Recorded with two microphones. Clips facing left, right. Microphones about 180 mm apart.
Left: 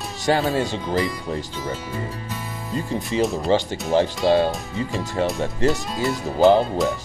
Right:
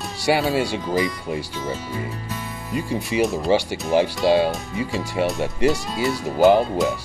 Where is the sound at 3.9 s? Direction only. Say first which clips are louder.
Even; 15° right (ahead or behind).